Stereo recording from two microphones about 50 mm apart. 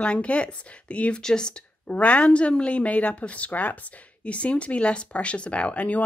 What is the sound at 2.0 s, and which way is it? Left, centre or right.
Speech, left.